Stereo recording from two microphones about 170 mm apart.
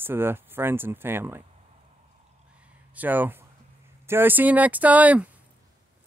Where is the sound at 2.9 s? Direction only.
10° right (ahead or behind).